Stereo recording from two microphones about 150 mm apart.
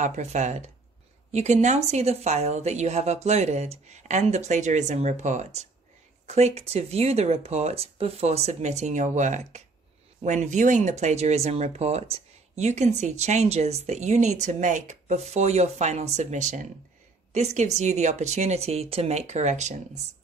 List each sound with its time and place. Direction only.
0.0 s speech: 50° right (ahead or behind)